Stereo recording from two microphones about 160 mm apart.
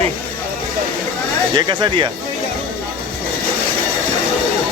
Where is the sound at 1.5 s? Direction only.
30° right (ahead or behind).